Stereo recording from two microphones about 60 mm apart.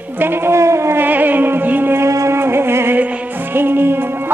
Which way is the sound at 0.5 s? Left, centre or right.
Right.